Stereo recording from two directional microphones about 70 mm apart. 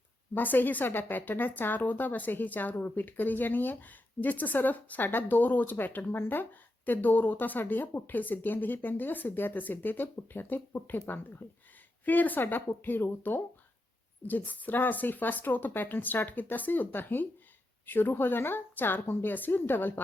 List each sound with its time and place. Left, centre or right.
0.3 s a woman's voice: left
12.0 s a woman's voice: left